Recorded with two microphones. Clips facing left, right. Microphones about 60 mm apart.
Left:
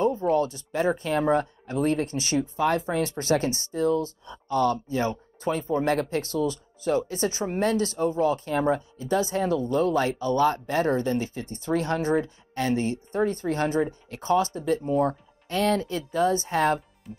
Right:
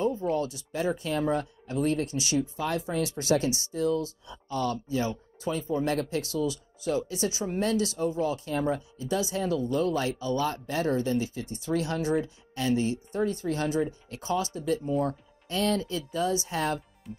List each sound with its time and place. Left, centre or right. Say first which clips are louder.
0.0 s a sound: left 5 dB; left
0.7 s speech: left 4 dB; left
17.1 s music: left 1 dB; centre